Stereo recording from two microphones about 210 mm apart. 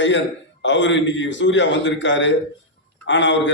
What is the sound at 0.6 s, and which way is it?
A man's voice, 60° left (ahead or behind).